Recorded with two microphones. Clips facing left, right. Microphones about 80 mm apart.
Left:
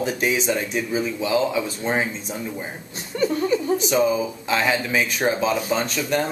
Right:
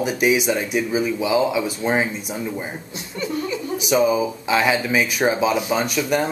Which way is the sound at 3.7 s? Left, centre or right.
Centre.